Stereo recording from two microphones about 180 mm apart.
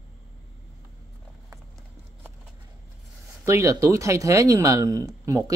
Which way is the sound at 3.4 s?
15° right (ahead or behind).